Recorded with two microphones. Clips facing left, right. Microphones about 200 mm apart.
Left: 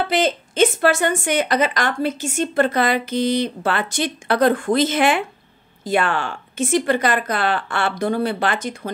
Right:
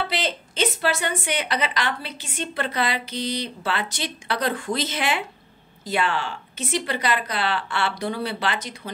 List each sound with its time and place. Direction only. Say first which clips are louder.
0.1 s a woman's voice: left 8 dB; 50° left (ahead or behind)